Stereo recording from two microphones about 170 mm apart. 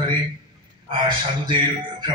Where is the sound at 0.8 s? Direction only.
25° right (ahead or behind).